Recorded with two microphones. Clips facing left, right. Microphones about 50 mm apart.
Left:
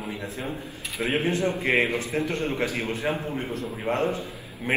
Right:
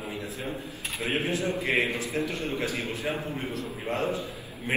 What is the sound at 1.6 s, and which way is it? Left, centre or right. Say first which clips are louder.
A man's voice: left 3 dB; left.